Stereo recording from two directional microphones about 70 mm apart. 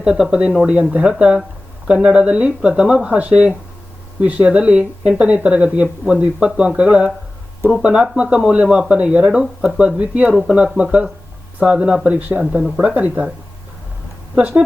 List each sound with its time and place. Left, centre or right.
0.0 s speech: centre
8.6 s speech: centre
8.9 s speech: centre
14.3 s speech: centre